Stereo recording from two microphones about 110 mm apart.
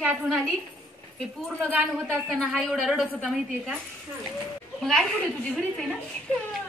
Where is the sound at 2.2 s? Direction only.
5° left (ahead or behind).